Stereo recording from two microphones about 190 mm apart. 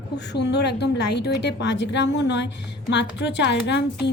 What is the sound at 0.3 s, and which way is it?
A woman's voice, 60° left (ahead or behind).